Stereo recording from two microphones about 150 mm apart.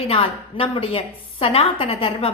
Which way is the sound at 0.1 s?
40° left (ahead or behind).